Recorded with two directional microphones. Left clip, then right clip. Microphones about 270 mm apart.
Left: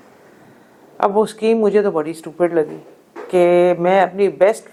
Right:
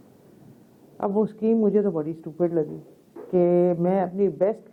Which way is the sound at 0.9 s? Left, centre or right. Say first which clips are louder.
Left 9 dB; centre.